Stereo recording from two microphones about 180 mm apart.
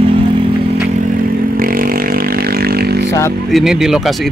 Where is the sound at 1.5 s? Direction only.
55° right (ahead or behind).